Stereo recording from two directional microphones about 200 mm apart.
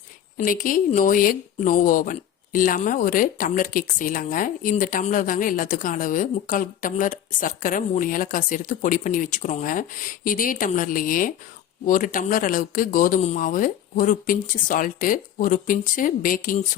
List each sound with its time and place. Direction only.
0.3 s speech: 45° left (ahead or behind)